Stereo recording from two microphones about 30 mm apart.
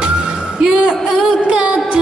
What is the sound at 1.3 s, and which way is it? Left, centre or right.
Music, right.